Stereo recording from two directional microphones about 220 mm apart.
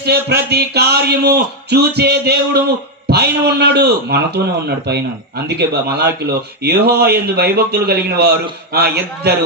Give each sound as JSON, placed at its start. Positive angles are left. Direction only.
{"t": 0.0, "sound": "speech", "side_deg": -45}